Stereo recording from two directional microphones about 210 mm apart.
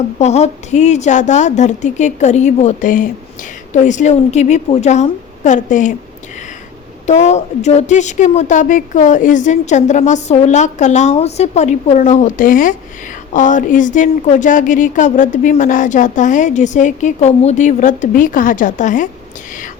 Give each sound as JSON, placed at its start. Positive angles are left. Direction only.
{"t": 0.2, "sound": "a woman's voice", "side_deg": 30}
{"t": 7.1, "sound": "a woman's voice", "side_deg": 30}